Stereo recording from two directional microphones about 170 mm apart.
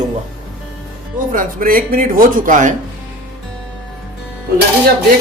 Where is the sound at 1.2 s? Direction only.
55° right (ahead or behind).